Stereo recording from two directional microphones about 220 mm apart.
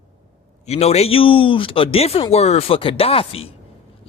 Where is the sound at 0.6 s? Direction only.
30° left (ahead or behind).